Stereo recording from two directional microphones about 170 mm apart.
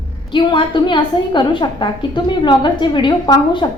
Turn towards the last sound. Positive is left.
turn(degrees=25)  # may be behind; listen again after turning